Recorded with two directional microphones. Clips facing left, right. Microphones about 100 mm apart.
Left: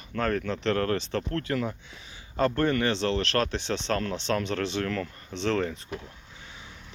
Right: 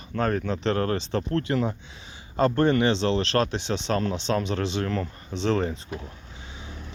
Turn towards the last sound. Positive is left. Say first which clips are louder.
# right 2 dB
turn(degrees=-20)  # may be behind; listen again after turning